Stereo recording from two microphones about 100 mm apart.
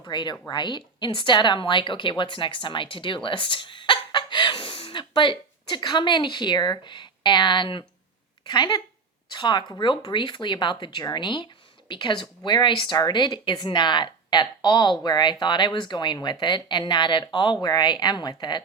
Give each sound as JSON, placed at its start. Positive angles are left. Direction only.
{"t": 0.1, "sound": "a woman's voice", "side_deg": 50}